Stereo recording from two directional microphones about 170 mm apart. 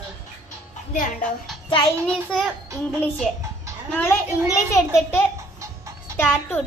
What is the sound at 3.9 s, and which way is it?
Speech, 15° left (ahead or behind).